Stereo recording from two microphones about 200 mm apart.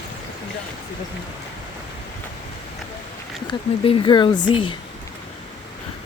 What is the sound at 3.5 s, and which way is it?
Speech, 25° left (ahead or behind).